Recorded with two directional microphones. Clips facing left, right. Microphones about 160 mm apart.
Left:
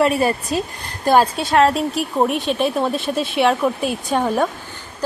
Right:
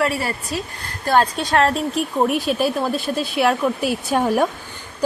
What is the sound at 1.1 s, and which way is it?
Speech, 5° left (ahead or behind).